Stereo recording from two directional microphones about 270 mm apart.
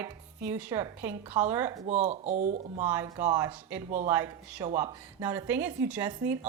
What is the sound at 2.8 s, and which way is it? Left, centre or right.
A woman's voice, centre.